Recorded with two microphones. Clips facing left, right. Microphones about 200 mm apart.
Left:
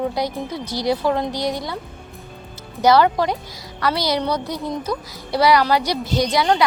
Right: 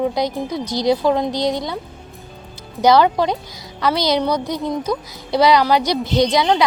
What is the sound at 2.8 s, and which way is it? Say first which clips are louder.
A woman's voice: right 1 dB; 15° right (ahead or behind).